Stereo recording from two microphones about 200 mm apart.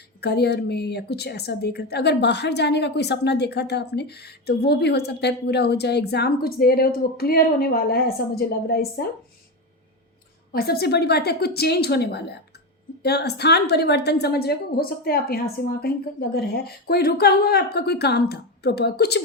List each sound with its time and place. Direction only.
0.2 s a woman's voice: 55° left (ahead or behind)
10.5 s a woman's voice: 50° left (ahead or behind)